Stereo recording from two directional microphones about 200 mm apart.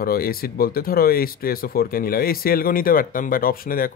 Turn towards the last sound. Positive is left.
turn(degrees=45)  # may be behind; listen again after turning